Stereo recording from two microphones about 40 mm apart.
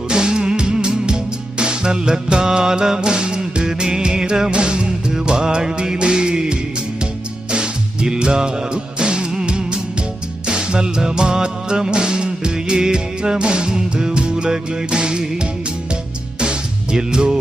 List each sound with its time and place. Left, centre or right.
0.1 s music: centre
16.4 s music: right